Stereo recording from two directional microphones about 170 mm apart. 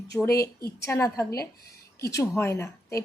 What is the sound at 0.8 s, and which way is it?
Speech, 15° left (ahead or behind).